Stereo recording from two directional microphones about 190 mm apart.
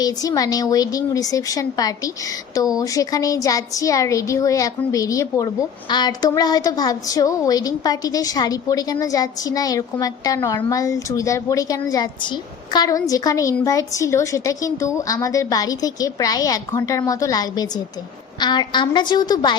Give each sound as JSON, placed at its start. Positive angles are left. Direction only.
{"t": 0.0, "sound": "a woman's voice", "side_deg": 20}